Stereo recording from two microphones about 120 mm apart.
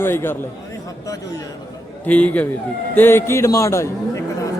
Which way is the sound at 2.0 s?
10° left (ahead or behind).